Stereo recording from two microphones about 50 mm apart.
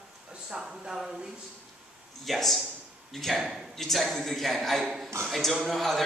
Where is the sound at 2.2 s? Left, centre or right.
Centre.